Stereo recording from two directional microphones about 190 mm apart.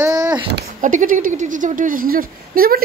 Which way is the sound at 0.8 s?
45° right (ahead or behind).